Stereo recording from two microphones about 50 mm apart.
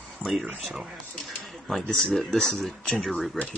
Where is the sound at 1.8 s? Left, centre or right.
Centre.